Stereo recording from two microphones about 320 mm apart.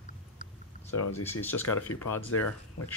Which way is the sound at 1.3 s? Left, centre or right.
Centre.